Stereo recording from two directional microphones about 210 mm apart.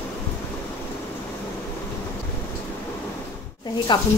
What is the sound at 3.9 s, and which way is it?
Speech, 20° left (ahead or behind).